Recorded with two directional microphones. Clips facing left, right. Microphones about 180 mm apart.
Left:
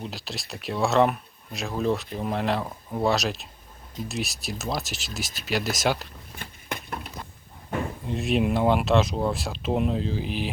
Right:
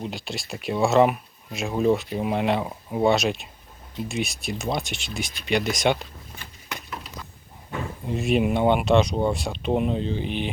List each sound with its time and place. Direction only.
0.0 s speech: centre (ahead or behind)
6.4 s a sound: 55° left (ahead or behind)
8.0 s speech: centre (ahead or behind)